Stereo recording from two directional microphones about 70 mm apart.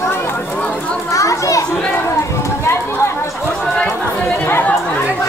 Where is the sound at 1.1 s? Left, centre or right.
Left.